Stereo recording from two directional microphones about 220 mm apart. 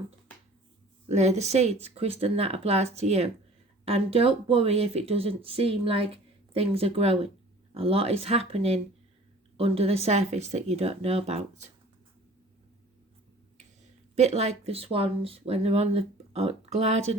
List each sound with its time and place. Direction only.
1.0 s speech: 30° right (ahead or behind)
14.2 s speech: 30° right (ahead or behind)